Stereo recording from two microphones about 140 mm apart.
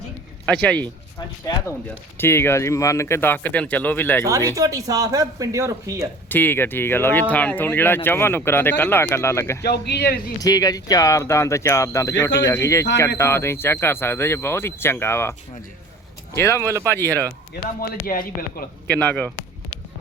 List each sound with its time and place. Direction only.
0.4 s speech: 10° left (ahead or behind)
2.1 s speech: 15° left (ahead or behind)
4.5 s speech: 25° right (ahead or behind)
6.2 s speech: 15° left (ahead or behind)
17.5 s a man's voice: 90° left
18.9 s speech: 10° left (ahead or behind)